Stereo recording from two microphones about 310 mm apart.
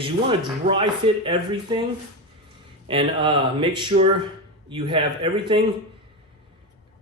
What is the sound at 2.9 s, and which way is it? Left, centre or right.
Speech, centre.